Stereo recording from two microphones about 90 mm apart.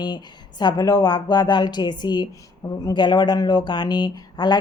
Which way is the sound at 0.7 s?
40° left (ahead or behind).